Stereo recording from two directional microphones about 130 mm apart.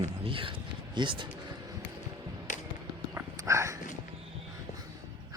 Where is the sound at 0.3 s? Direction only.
40° right (ahead or behind).